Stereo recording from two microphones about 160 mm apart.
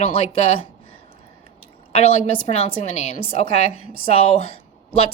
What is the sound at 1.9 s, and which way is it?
Speech, 40° left (ahead or behind).